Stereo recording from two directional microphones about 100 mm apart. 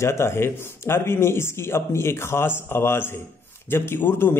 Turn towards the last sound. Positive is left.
turn(degrees=20)  # may be behind; listen again after turning